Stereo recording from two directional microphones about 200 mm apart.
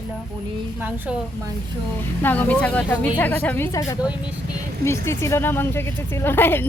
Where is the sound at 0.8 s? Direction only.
10° right (ahead or behind).